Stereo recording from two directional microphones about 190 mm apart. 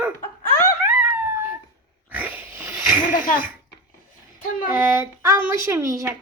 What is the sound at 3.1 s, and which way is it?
Speech, 45° left (ahead or behind).